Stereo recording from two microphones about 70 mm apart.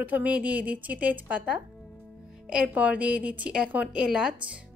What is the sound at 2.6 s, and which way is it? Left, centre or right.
A woman's voice, right.